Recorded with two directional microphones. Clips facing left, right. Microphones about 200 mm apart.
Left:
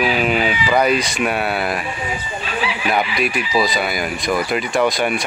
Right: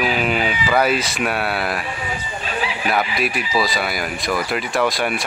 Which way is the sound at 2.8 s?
Centre (ahead or behind).